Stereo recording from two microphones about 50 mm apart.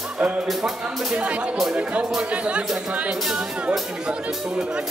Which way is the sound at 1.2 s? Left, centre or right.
Right.